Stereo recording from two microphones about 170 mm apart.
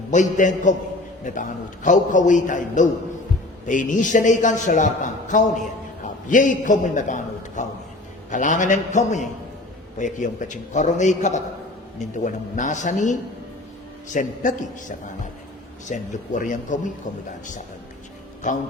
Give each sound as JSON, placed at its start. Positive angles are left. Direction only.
{"t": 0.1, "sound": "a man's voice", "side_deg": 45}
{"t": 18.4, "sound": "a man's voice", "side_deg": 50}